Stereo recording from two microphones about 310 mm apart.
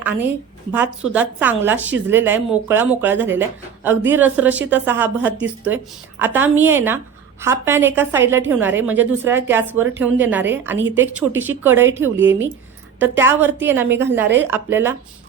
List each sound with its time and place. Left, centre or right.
0.0 s a woman's voice: centre